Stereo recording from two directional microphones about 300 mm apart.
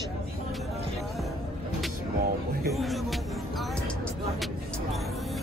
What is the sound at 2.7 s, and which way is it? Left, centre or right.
Speech, centre.